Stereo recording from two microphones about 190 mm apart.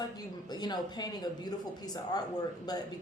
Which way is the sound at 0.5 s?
20° left (ahead or behind).